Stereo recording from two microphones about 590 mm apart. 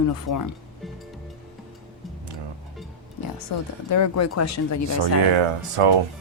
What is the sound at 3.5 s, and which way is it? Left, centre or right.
A woman's voice, left.